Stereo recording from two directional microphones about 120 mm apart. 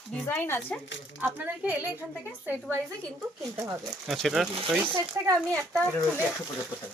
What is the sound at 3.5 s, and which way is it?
Speech, 25° right (ahead or behind).